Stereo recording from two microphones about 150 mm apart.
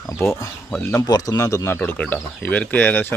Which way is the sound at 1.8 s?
10° left (ahead or behind).